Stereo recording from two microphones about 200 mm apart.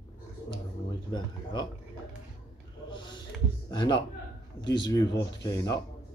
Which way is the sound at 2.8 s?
25° left (ahead or behind).